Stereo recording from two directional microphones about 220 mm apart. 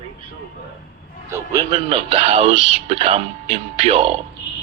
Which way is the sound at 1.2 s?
15° right (ahead or behind).